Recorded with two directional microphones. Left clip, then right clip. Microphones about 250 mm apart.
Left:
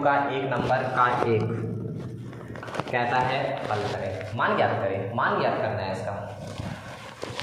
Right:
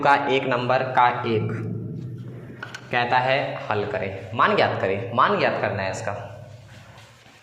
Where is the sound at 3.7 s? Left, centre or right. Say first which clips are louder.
Right 3 dB; right.